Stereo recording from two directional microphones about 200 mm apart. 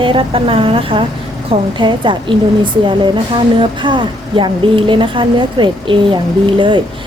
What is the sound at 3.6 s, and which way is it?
A woman's voice, 25° right (ahead or behind).